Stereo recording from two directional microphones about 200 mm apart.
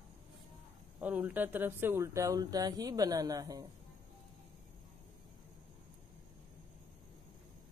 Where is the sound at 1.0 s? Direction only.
5° right (ahead or behind).